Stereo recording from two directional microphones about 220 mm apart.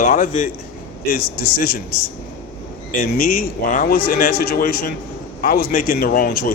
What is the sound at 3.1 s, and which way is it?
A man's voice, 40° left (ahead or behind).